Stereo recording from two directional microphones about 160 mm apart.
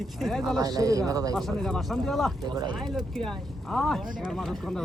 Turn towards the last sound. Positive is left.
turn(degrees=0)  # may be behind; listen again after turning